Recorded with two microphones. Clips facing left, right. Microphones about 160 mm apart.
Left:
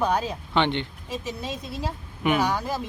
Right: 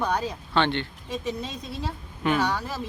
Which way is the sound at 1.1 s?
10° left (ahead or behind).